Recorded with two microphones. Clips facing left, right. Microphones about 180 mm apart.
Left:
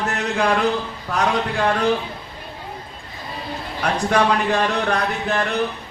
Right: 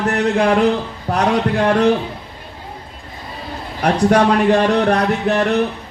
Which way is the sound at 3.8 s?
40° right (ahead or behind).